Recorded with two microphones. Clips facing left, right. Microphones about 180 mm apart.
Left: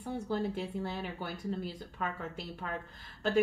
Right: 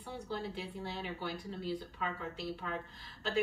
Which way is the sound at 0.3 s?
50° left (ahead or behind).